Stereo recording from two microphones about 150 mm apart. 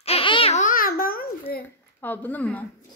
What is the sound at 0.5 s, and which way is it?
Babbling, 65° left (ahead or behind).